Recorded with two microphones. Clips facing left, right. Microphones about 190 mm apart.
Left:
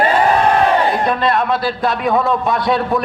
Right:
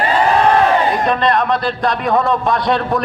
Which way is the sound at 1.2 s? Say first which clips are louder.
Right 1 dB; 5° left (ahead or behind).